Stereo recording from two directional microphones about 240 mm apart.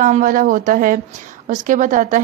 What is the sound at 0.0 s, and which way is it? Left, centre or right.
A woman's voice, right.